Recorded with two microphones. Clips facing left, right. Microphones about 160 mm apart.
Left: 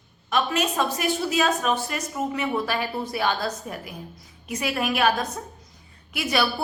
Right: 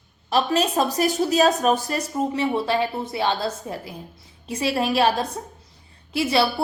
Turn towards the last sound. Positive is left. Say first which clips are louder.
# right 4 dB
turn(degrees=-30)  # may be behind; listen again after turning